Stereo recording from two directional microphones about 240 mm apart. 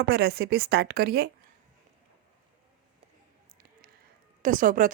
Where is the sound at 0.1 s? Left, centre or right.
Right.